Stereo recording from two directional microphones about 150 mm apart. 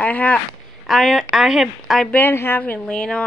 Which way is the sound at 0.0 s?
10° left (ahead or behind).